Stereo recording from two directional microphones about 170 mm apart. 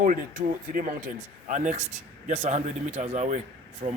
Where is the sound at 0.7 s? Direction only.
55° right (ahead or behind).